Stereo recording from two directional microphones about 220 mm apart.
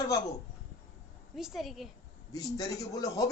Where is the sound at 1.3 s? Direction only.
Centre (ahead or behind).